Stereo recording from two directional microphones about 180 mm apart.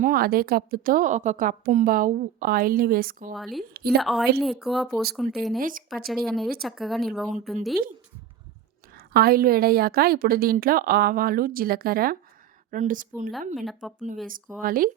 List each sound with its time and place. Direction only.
0.0 s a woman's voice: 55° right (ahead or behind)
3.3 s speech: centre (ahead or behind)
5.5 s a woman's voice: 50° right (ahead or behind)
6.1 s speech: centre (ahead or behind)
9.0 s a woman's voice: 55° right (ahead or behind)
13.6 s speech: centre (ahead or behind)
14.6 s a woman's voice: 50° right (ahead or behind)